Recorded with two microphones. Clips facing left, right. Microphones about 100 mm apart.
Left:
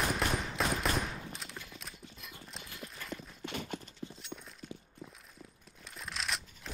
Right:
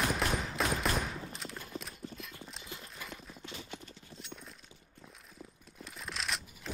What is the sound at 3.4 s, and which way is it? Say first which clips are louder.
Clip-clop: left 7 dB; 60° left (ahead or behind).